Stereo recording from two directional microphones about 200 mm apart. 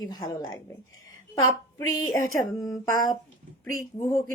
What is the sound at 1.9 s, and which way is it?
Speech, 20° left (ahead or behind).